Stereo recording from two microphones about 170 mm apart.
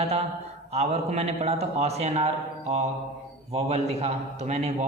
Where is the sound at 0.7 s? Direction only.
40° right (ahead or behind).